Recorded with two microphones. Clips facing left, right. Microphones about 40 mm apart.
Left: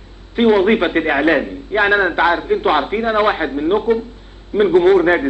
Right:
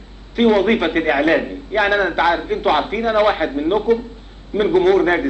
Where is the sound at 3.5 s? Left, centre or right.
Centre.